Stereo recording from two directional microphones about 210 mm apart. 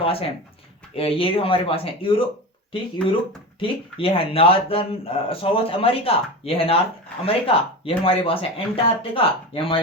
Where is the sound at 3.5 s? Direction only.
25° left (ahead or behind).